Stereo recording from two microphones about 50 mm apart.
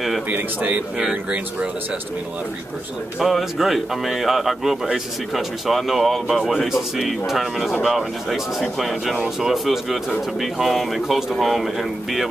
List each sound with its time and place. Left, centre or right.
0.3 s a man's voice: right
3.2 s speech: centre